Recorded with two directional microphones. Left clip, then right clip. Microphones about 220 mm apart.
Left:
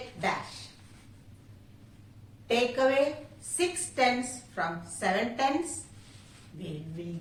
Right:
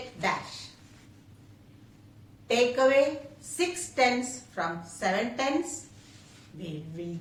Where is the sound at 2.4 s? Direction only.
15° right (ahead or behind).